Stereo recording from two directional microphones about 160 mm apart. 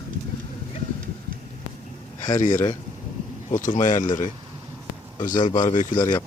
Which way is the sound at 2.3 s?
50° left (ahead or behind).